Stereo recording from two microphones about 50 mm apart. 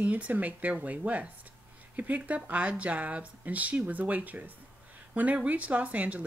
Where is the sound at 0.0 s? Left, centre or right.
Right.